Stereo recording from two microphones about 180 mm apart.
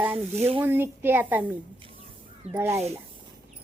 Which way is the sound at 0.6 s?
10° right (ahead or behind).